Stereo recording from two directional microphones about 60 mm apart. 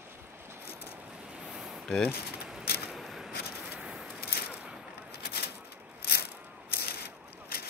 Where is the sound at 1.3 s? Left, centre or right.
Centre.